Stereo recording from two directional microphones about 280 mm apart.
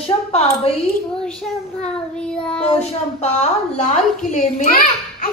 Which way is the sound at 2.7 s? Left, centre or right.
Left.